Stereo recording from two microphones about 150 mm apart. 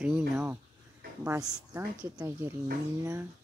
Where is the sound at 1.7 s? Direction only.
15° right (ahead or behind).